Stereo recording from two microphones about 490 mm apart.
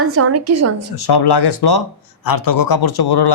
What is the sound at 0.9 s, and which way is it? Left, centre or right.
A man's voice, left.